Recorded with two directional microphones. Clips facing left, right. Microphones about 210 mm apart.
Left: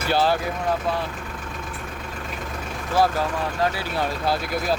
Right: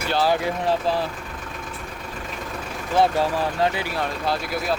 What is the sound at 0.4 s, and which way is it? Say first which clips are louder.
Speech: right 2 dB; 30° right (ahead or behind).